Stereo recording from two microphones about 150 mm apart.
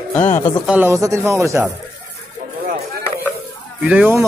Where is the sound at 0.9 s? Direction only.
20° right (ahead or behind).